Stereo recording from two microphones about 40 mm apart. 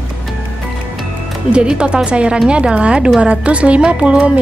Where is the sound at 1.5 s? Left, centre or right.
Right.